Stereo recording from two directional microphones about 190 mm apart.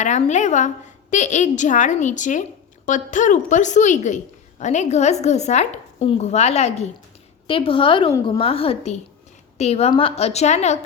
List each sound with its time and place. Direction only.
0.0 s a woman's voice: 40° left (ahead or behind)